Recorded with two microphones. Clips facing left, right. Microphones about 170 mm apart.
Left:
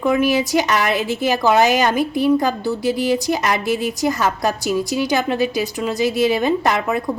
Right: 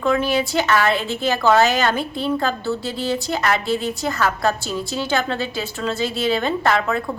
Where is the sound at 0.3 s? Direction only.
20° left (ahead or behind).